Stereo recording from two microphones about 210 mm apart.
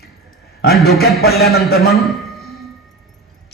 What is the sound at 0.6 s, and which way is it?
A man's voice, 50° left (ahead or behind).